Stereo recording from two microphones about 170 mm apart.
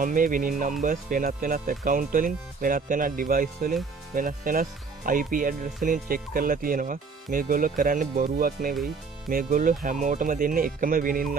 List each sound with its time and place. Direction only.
0.0 s speech: 50° right (ahead or behind)